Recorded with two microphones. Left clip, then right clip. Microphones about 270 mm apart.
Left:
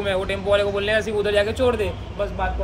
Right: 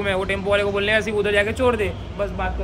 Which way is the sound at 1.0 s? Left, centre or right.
Centre.